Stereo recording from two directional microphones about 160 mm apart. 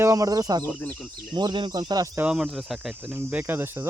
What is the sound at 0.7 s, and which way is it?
Speech, 5° left (ahead or behind).